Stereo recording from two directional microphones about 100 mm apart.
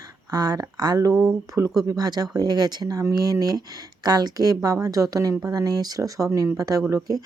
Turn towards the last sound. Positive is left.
turn(degrees=-40)  # may be behind; listen again after turning